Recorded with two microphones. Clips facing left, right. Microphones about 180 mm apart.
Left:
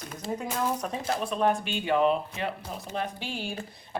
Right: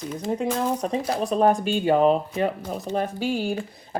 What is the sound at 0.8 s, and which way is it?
Speech, 30° right (ahead or behind).